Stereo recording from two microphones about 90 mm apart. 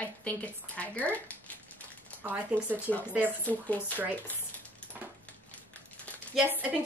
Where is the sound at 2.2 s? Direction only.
20° right (ahead or behind).